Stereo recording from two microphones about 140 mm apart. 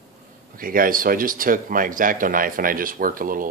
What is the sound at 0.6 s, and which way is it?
Speech, 90° right.